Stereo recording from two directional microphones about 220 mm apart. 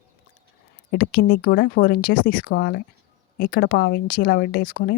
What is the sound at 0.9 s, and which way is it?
A woman's voice, 45° left (ahead or behind).